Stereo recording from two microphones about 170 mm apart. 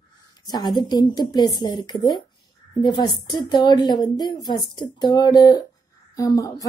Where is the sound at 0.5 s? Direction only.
25° left (ahead or behind).